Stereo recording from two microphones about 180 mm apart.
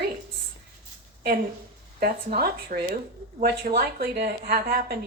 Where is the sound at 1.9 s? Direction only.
55° right (ahead or behind).